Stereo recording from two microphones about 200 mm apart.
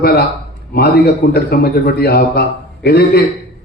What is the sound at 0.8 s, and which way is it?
A man's voice, 55° left (ahead or behind).